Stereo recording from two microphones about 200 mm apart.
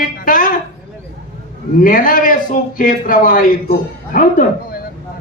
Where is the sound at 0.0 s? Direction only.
45° left (ahead or behind).